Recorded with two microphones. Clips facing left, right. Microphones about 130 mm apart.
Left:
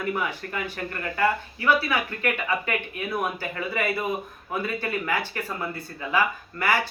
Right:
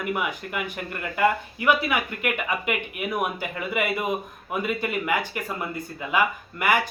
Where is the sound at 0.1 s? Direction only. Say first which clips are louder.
Right 2 dB; 15° right (ahead or behind).